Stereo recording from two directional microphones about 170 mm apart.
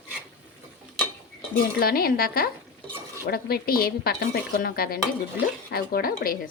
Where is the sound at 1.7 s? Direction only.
60° left (ahead or behind).